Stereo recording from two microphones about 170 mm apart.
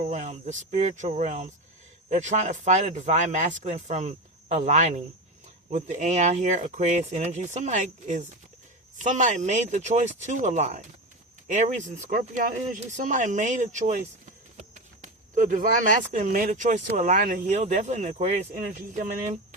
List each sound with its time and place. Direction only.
0.0 s speech: 40° right (ahead or behind)